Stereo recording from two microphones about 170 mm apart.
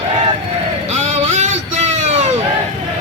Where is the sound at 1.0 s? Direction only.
40° right (ahead or behind).